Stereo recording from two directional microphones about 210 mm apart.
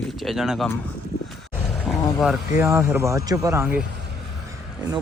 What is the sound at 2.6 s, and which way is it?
Speech, 15° right (ahead or behind).